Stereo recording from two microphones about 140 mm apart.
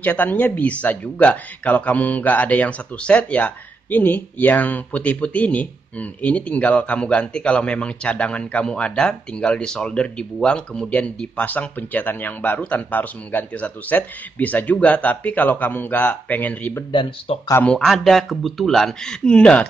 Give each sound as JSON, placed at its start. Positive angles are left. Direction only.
{"t": 0.0, "sound": "speech", "side_deg": 10}
{"t": 16.9, "sound": "speech", "side_deg": 35}
{"t": 17.6, "sound": "speech", "side_deg": 5}